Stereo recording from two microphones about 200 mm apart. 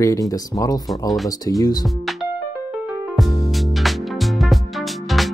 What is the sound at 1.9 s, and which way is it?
Music, centre (ahead or behind).